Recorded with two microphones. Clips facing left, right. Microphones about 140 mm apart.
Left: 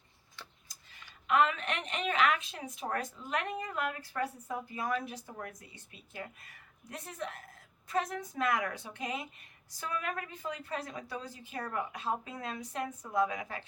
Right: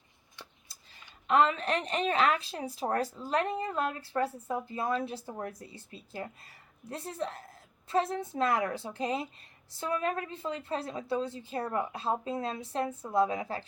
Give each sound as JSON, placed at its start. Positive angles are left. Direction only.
{"t": 1.3, "sound": "a woman's voice", "side_deg": -35}